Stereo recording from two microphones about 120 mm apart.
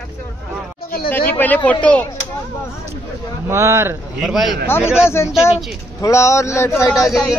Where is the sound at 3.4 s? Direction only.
20° right (ahead or behind).